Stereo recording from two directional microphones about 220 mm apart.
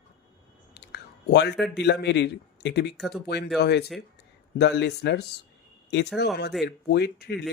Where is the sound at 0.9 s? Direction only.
50° left (ahead or behind).